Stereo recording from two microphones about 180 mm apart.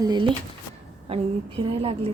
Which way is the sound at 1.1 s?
35° right (ahead or behind).